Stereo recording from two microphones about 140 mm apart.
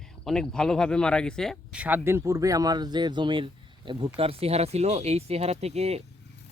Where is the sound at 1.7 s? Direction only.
10° right (ahead or behind).